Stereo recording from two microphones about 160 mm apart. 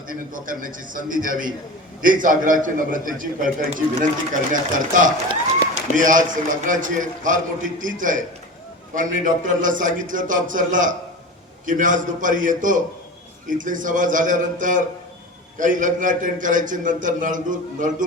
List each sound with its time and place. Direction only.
0.1 s a man's voice: 60° right (ahead or behind)